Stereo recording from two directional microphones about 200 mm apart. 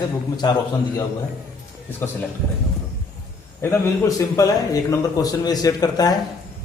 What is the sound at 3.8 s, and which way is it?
A man's voice, 15° left (ahead or behind).